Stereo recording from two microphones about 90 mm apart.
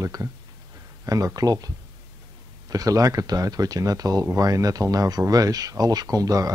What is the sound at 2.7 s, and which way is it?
Speech, 40° right (ahead or behind).